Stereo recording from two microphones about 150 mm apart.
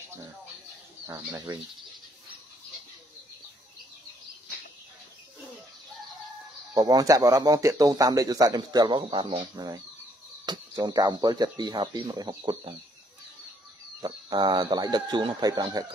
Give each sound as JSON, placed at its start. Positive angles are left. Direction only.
{"t": 1.0, "sound": "speech", "side_deg": -20}
{"t": 6.7, "sound": "speech", "side_deg": -25}
{"t": 14.0, "sound": "speech", "side_deg": -30}